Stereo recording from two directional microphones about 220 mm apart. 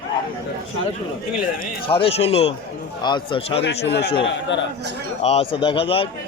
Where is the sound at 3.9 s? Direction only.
50° left (ahead or behind).